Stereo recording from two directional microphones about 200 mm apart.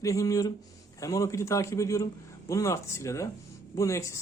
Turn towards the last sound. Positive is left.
turn(degrees=15)  # may be behind; listen again after turning